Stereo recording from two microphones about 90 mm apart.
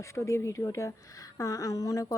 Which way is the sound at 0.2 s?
30° left (ahead or behind).